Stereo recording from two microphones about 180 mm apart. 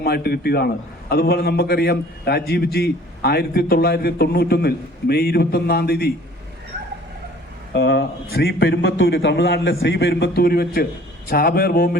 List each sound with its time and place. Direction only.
0.0 s a man's voice: 60° left (ahead or behind)
7.7 s a man's voice: 75° left (ahead or behind); by 11.9 s 55° left (ahead or behind)